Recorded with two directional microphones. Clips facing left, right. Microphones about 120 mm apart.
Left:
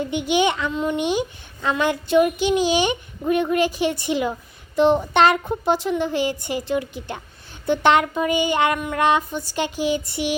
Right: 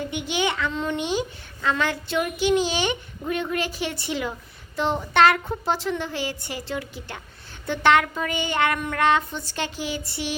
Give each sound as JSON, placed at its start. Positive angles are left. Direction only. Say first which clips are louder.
{"t": 0.1, "sound": "speech", "louder": "left 8 dB", "side_deg": 20}